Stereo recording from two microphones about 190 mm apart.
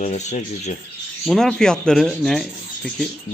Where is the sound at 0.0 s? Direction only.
35° left (ahead or behind).